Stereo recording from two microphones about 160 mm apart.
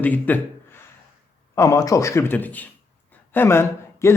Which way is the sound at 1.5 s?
20° left (ahead or behind).